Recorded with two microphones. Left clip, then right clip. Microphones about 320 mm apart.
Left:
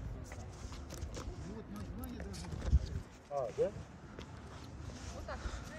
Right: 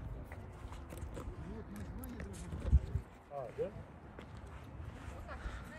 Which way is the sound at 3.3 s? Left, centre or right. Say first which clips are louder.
Left 6 dB; left.